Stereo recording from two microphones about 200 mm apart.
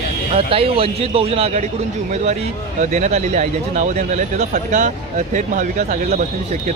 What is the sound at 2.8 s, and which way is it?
Speech, 35° right (ahead or behind).